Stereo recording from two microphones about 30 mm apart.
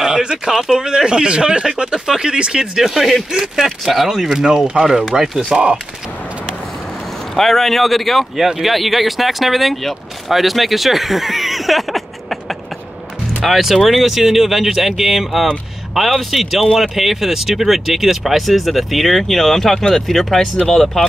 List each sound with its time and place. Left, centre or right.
0.0 s a sound: right
0.5 s speech: centre; by 2.6 s right
2.6 s speech: centre
4.3 s speech: centre
7.3 s speech: centre
13.5 s speech: centre